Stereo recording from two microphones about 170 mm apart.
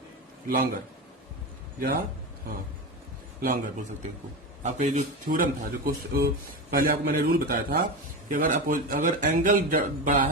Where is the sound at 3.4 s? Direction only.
50° right (ahead or behind).